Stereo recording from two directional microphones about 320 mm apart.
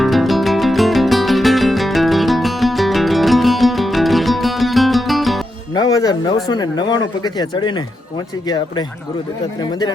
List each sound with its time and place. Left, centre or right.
0.0 s music: centre
5.7 s speech: centre